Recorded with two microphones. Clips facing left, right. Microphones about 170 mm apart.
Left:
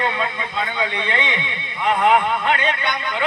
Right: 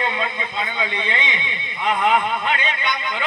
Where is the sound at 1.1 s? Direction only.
60° left (ahead or behind).